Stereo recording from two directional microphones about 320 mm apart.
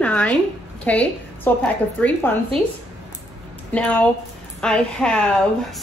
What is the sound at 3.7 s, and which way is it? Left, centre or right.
A woman's voice, centre.